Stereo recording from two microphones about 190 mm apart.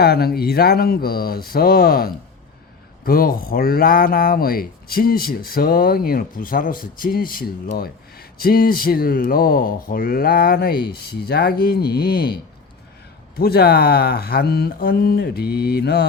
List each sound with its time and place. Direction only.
0.0 s speech: 55° left (ahead or behind)